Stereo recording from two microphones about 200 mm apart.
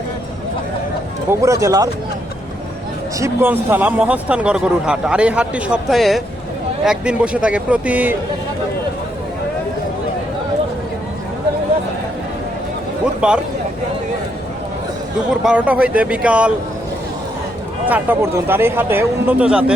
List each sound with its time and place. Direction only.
1.3 s speech: 15° right (ahead or behind)
3.2 s speech: 15° right (ahead or behind)
13.2 s speech: 5° right (ahead or behind)
15.3 s speech: 5° right (ahead or behind)
17.8 s speech: 10° right (ahead or behind)